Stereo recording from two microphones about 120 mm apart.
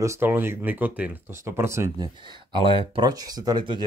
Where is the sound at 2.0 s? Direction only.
40° right (ahead or behind).